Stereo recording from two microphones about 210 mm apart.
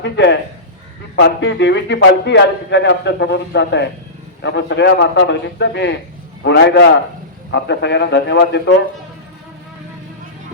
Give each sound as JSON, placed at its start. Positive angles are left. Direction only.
{"t": 0.0, "sound": "a man's voice", "side_deg": 55}